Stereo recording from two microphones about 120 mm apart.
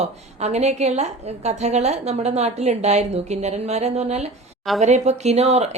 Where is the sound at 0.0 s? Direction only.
65° right (ahead or behind).